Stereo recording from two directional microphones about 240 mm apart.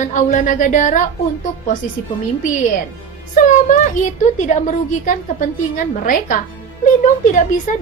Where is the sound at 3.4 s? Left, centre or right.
Left.